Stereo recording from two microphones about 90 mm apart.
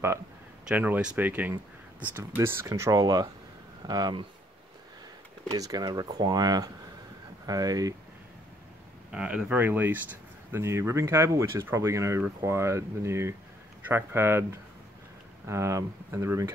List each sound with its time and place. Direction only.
0.7 s speech: 15° right (ahead or behind); by 2.9 s 35° right (ahead or behind)
2.9 s speech: 45° right (ahead or behind)
5.5 s speech: 45° right (ahead or behind)
9.1 s speech: 10° right (ahead or behind); by 16.5 s 30° right (ahead or behind)